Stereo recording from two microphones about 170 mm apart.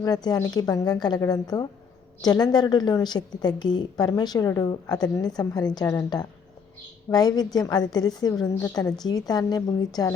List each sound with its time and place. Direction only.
0.0 s a woman's voice: 25° left (ahead or behind)
7.1 s a woman's voice: 20° left (ahead or behind)